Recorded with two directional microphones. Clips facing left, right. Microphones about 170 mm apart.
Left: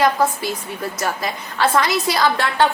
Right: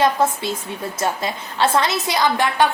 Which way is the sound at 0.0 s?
25° right (ahead or behind).